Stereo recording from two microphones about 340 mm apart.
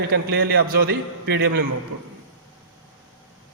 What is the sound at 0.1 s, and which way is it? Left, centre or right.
A man's voice, right.